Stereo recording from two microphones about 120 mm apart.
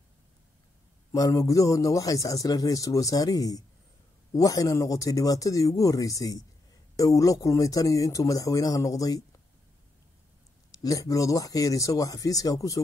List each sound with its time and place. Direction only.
1.1 s a man's voice: 30° left (ahead or behind)
10.8 s a man's voice: 30° left (ahead or behind)